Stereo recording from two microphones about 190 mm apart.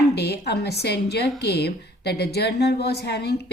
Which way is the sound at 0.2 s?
60° left (ahead or behind).